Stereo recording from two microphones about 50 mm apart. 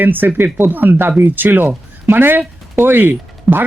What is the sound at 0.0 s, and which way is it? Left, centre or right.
A man's voice, right.